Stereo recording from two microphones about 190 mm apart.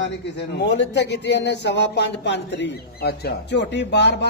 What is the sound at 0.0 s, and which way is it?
A man's voice, 65° left (ahead or behind).